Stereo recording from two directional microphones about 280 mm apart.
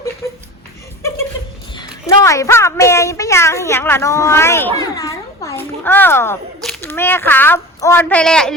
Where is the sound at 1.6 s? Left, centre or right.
Centre.